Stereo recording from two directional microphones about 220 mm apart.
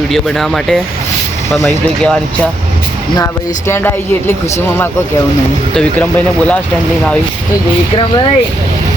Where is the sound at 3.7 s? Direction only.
10° left (ahead or behind).